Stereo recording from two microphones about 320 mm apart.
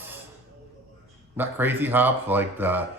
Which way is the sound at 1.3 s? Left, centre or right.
Centre.